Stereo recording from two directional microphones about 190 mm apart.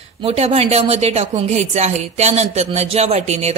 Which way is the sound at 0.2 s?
30° right (ahead or behind).